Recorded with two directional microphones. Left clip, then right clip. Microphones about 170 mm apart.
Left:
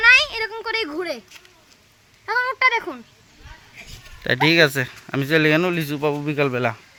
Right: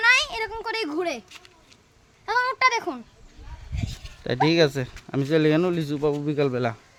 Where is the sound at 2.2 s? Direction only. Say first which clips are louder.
Left 2 dB; 50° right (ahead or behind).